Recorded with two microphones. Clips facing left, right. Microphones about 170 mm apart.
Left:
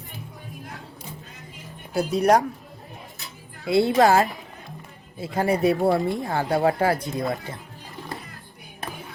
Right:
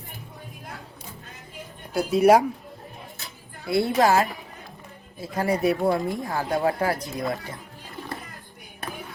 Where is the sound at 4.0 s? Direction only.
35° left (ahead or behind).